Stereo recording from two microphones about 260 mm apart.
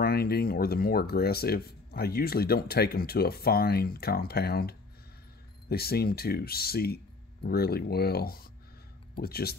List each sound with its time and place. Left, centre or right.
0.0 s speech: left